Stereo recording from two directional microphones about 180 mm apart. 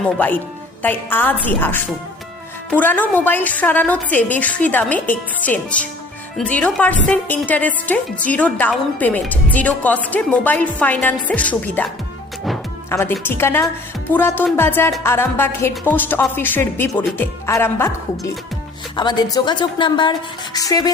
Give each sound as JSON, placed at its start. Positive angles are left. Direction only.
{"t": 0.8, "sound": "a woman's voice", "side_deg": 10}
{"t": 12.9, "sound": "a woman's voice", "side_deg": 10}
{"t": 18.9, "sound": "a woman's voice", "side_deg": 25}